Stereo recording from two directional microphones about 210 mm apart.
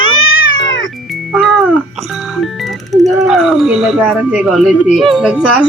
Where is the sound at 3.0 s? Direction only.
Centre (ahead or behind).